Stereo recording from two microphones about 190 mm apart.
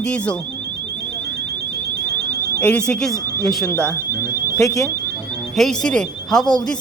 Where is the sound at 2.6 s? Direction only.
10° left (ahead or behind).